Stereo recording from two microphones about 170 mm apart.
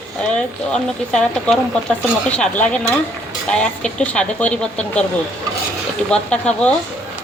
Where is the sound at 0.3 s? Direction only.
5° left (ahead or behind).